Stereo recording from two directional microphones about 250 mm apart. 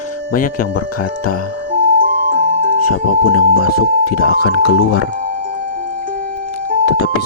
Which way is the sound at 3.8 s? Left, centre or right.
Left.